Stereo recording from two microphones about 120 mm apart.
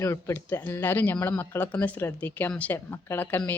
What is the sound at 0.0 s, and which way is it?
Speech, 20° left (ahead or behind).